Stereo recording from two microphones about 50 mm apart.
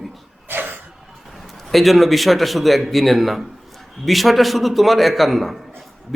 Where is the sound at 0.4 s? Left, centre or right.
Right.